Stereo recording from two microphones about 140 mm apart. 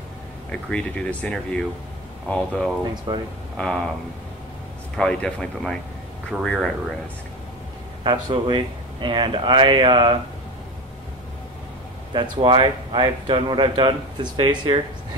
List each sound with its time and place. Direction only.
0.5 s speech: 5° left (ahead or behind)
2.8 s speech: 30° right (ahead or behind)
3.5 s speech: 5° left (ahead or behind)
4.9 s speech: 5° left (ahead or behind)
8.0 s speech: 35° right (ahead or behind)
12.1 s speech: 35° right (ahead or behind)